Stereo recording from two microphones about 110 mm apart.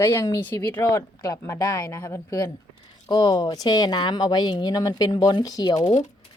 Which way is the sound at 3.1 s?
40° left (ahead or behind).